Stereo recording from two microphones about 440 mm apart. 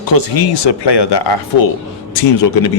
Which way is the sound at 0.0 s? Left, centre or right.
Left.